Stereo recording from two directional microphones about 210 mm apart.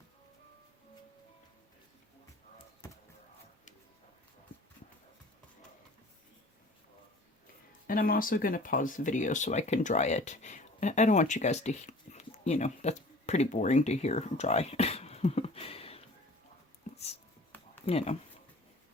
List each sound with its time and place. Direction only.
7.9 s speech: 45° left (ahead or behind)
16.9 s a sound: 30° left (ahead or behind)
17.8 s speech: 30° left (ahead or behind)